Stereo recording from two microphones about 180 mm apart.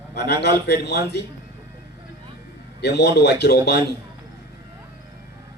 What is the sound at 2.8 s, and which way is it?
A man's voice, 70° left (ahead or behind).